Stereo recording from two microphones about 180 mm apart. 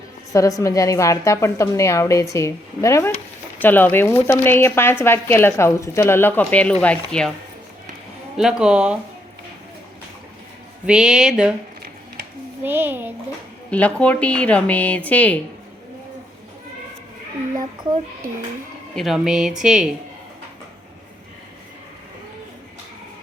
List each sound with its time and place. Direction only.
0.3 s a woman's voice: 20° left (ahead or behind)
8.4 s a woman's voice: 5° right (ahead or behind)
10.8 s a woman's voice: 5° right (ahead or behind)
12.6 s a child's voice: 10° right (ahead or behind)
13.7 s speech: 5° left (ahead or behind)
18.9 s a woman's voice: centre (ahead or behind)